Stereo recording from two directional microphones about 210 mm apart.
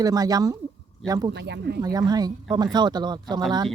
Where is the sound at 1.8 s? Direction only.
20° right (ahead or behind).